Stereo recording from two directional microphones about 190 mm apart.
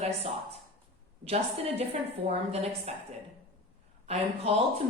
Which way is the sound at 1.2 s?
30° right (ahead or behind).